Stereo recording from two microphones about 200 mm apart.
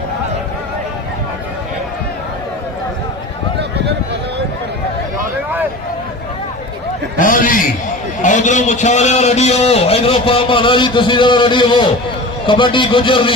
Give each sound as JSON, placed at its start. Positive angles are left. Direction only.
{"t": 7.2, "sound": "a man's voice", "side_deg": 40}